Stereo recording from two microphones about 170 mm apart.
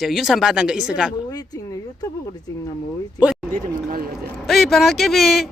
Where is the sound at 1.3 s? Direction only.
20° left (ahead or behind).